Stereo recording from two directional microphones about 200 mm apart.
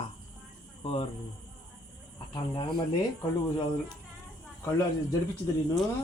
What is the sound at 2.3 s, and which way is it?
Speech, 25° left (ahead or behind).